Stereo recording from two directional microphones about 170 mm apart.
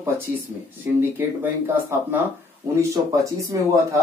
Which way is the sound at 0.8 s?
10° right (ahead or behind).